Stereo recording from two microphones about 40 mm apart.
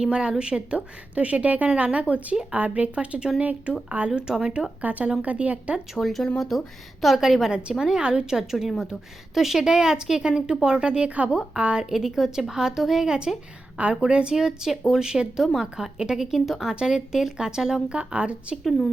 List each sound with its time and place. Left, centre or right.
0.0 s speech: right
4.1 s speech: centre
4.8 s speech: right
5.9 s speech: centre
7.0 s a woman's voice: centre; by 11.3 s right
11.3 s speech: right
11.9 s a woman's voice: centre
17.6 s a woman's voice: centre
17.8 s speech: right